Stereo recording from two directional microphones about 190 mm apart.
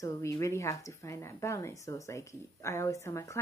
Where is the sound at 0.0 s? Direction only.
15° left (ahead or behind).